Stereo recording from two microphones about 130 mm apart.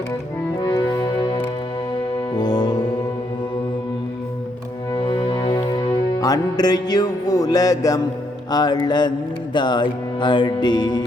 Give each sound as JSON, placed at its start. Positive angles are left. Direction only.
{"t": 0.7, "sound": "music", "side_deg": 30}
{"t": 4.9, "sound": "music", "side_deg": 35}